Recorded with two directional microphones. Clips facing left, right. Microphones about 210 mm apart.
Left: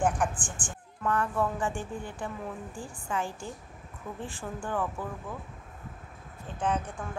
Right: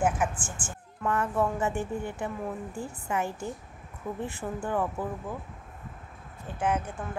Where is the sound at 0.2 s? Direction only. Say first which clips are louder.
Right 1 dB; 5° right (ahead or behind).